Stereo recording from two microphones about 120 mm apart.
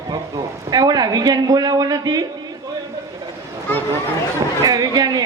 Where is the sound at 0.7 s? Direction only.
35° right (ahead or behind).